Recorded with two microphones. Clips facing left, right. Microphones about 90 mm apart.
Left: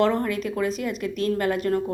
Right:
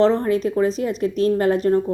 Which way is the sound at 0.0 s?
30° right (ahead or behind).